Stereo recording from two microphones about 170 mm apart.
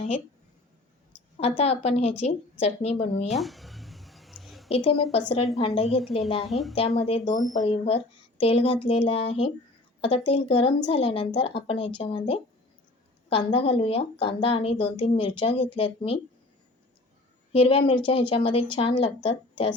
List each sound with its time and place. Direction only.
1.4 s a woman's voice: 35° left (ahead or behind)
3.2 s a sound: centre (ahead or behind)
4.7 s a woman's voice: 35° left (ahead or behind)
6.4 s a woman's voice: centre (ahead or behind)
6.7 s a woman's voice: 35° left (ahead or behind)
17.5 s a woman's voice: 30° left (ahead or behind)